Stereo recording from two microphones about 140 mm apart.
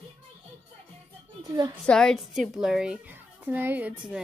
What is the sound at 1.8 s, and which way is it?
A child's voice, 5° left (ahead or behind).